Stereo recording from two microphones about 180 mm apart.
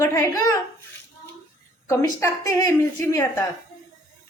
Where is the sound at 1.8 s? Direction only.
15° left (ahead or behind).